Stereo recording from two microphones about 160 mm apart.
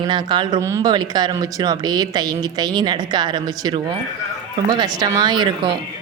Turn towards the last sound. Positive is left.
turn(degrees=-25)  # may be behind; listen again after turning